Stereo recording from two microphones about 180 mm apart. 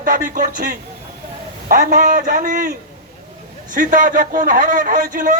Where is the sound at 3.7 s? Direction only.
50° right (ahead or behind).